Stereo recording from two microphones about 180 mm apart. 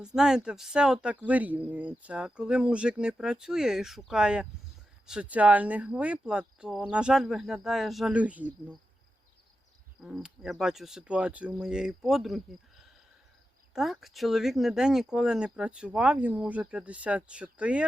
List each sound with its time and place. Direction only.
0.0 s speech: 5° right (ahead or behind)
10.0 s speech: centre (ahead or behind)